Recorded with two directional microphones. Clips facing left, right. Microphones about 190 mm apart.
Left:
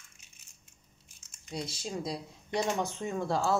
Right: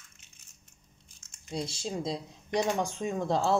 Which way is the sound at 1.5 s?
30° right (ahead or behind).